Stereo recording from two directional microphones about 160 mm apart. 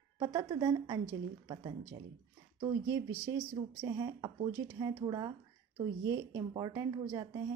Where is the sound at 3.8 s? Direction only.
25° right (ahead or behind).